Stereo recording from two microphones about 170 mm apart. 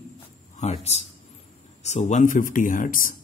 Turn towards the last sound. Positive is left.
turn(degrees=55)  # may be behind; listen again after turning